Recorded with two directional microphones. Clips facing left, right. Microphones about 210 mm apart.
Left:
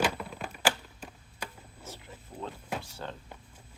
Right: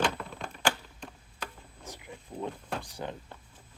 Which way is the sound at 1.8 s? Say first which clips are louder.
Right 2 dB; 15° right (ahead or behind).